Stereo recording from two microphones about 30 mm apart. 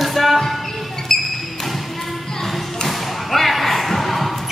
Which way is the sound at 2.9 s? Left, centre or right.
Centre.